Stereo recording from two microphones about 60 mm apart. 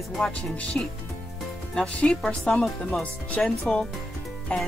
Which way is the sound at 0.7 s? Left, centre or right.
Left.